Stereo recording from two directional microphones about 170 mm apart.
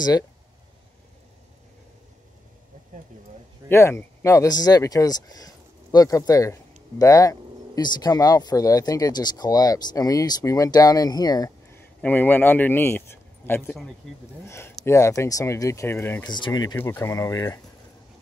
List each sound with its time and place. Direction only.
3.6 s speech: 15° left (ahead or behind)
12.0 s speech: 10° left (ahead or behind)
14.0 s speech: centre (ahead or behind)
14.4 s speech: 15° left (ahead or behind)
16.3 s speech: 25° left (ahead or behind)
16.7 s speech: 15° left (ahead or behind)